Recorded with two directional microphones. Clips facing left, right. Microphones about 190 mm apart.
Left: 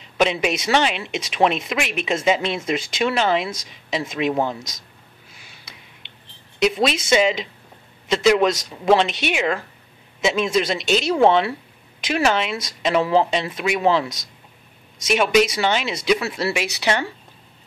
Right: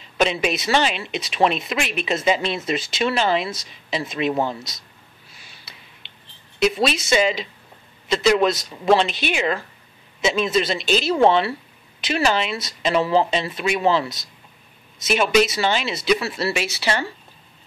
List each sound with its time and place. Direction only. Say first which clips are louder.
0.2 s speech: left 1 dB; 15° left (ahead or behind)
6.6 s speech: left 1 dB; 15° left (ahead or behind)
15.0 s speech: left 1 dB; 15° left (ahead or behind)